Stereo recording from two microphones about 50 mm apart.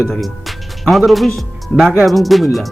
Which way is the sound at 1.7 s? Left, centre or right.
Centre.